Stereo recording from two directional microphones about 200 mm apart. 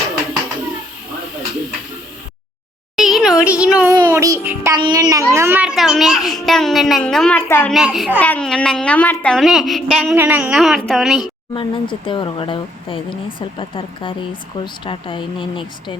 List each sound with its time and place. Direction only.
2.9 s a sound: centre (ahead or behind)
3.4 s music: 5° right (ahead or behind)
3.9 s music: 20° right (ahead or behind)
4.8 s a child's voice: 20° right (ahead or behind); by 7.7 s 10° left (ahead or behind)
7.7 s a child's voice: centre (ahead or behind)
11.5 s speech: 25° left (ahead or behind)